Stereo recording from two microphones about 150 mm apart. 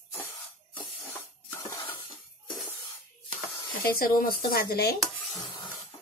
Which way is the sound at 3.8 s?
75° left (ahead or behind).